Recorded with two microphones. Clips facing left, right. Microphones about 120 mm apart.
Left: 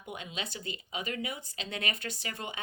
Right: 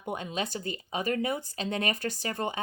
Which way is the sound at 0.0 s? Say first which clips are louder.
Right 7 dB; 45° right (ahead or behind).